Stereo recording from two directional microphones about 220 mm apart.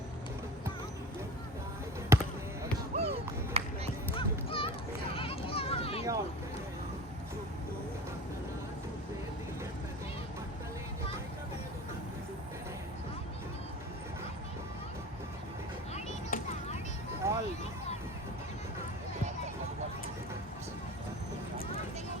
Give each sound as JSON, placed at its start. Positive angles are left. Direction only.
{"t": 2.1, "sound": "basketball bounce", "side_deg": -10}
{"t": 2.9, "sound": "music", "side_deg": -30}
{"t": 4.1, "sound": "music", "side_deg": 25}
{"t": 5.1, "sound": "a sound", "side_deg": 25}
{"t": 16.0, "sound": "chop", "side_deg": 30}
{"t": 17.2, "sound": "a sound", "side_deg": -15}